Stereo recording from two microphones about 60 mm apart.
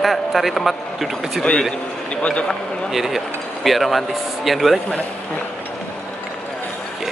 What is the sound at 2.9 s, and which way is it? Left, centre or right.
Speech, centre.